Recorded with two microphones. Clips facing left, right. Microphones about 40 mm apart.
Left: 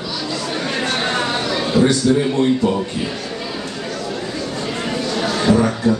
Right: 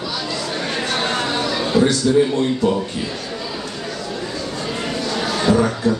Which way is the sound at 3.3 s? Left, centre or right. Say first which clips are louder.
Left 1 dB; left.